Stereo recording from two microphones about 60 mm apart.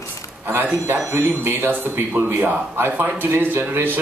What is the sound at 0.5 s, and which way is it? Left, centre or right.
Speech, right.